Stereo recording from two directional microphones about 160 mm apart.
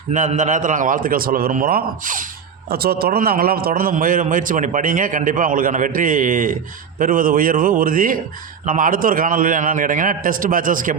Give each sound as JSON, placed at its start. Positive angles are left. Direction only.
{"t": 0.1, "sound": "a man's voice", "side_deg": -50}
{"t": 2.6, "sound": "a man's voice", "side_deg": -75}